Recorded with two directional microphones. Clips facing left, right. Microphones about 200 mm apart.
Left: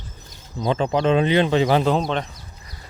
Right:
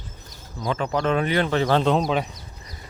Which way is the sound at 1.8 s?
Centre (ahead or behind).